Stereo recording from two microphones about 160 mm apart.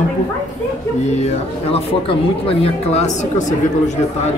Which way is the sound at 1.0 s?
45° left (ahead or behind).